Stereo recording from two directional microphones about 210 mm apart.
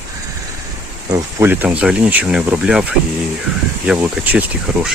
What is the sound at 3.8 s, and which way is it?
Speech, 5° right (ahead or behind).